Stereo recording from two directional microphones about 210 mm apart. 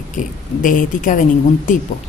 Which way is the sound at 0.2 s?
40° left (ahead or behind).